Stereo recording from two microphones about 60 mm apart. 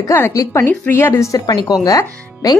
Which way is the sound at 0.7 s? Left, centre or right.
Left.